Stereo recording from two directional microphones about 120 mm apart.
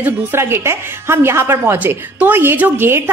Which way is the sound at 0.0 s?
20° right (ahead or behind).